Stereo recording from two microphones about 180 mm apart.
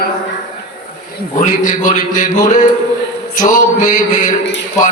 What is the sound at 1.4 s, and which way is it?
A man's voice, 45° left (ahead or behind).